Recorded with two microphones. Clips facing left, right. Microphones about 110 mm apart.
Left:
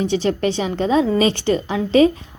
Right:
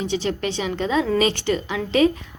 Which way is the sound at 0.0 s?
40° left (ahead or behind).